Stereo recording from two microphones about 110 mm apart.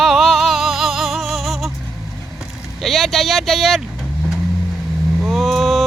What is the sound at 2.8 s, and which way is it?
Speech, centre (ahead or behind).